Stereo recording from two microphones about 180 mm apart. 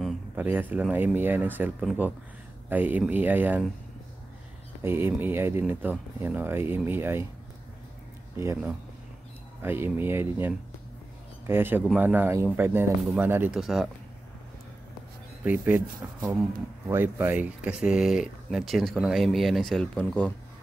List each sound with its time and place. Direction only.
0.4 s speech: 10° right (ahead or behind)
4.8 s speech: 15° right (ahead or behind)
8.4 s speech: 15° right (ahead or behind)
15.4 s speech: 10° right (ahead or behind)
16.9 s speech: 10° right (ahead or behind); by 20.3 s 5° left (ahead or behind)